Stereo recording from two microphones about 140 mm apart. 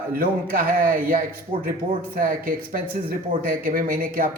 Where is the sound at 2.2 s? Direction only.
90° right.